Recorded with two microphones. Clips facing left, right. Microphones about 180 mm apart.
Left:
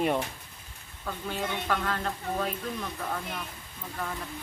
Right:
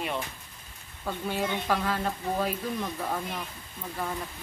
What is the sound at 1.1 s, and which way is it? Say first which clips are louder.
Speech: right 3 dB; 10° right (ahead or behind).